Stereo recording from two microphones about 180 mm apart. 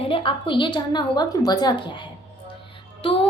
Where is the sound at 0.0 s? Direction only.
30° left (ahead or behind).